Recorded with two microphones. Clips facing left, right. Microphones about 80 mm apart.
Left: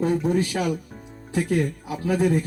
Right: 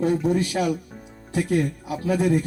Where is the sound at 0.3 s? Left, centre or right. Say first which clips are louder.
Right 1 dB; left.